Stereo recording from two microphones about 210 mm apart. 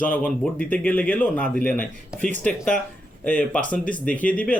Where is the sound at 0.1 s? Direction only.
5° left (ahead or behind).